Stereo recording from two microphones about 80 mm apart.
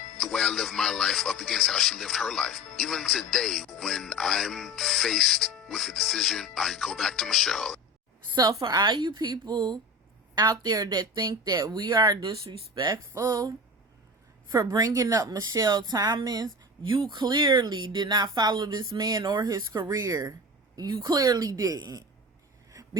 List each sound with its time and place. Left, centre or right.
0.2 s speech: centre
8.6 s a woman's voice: right
10.3 s a woman's voice: right
14.5 s a woman's voice: right
17.1 s a woman's voice: right